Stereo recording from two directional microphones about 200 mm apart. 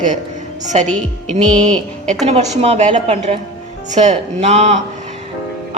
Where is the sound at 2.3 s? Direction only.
30° right (ahead or behind).